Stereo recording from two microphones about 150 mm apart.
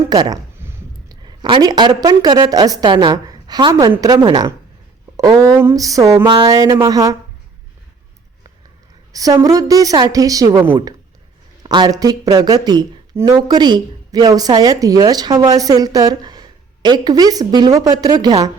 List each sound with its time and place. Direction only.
0.0 s speech: 25° right (ahead or behind)
5.1 s a sound: 25° right (ahead or behind)
6.5 s speech: 20° right (ahead or behind)
9.1 s speech: 25° right (ahead or behind)
11.6 s speech: 30° right (ahead or behind)